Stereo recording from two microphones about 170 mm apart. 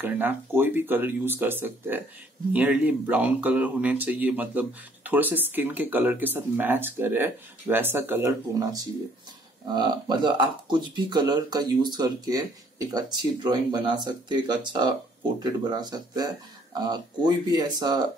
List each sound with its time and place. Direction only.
0.0 s speech: 10° right (ahead or behind)